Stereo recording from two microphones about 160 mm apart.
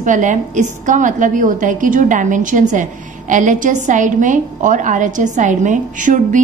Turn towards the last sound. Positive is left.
turn(degrees=-55)  # may be behind; listen again after turning